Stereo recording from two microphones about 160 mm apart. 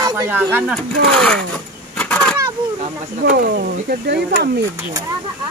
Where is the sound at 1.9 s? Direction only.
5° left (ahead or behind).